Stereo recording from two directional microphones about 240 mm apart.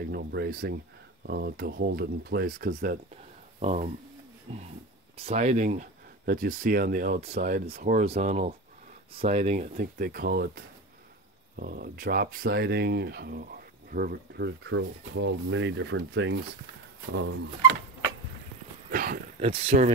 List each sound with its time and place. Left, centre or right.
0.1 s speech: right
18.9 s speech: right
19.5 s speech: right